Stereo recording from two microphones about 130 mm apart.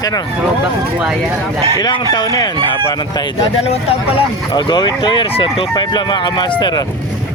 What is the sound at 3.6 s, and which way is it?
Speech, 50° left (ahead or behind).